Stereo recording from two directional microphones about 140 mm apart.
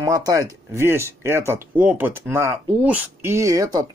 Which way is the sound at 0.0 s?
25° right (ahead or behind).